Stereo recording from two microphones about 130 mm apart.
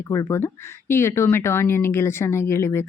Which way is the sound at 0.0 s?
25° left (ahead or behind).